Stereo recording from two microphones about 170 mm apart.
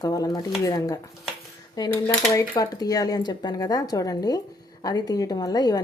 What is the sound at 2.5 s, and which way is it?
A woman's voice, 20° left (ahead or behind).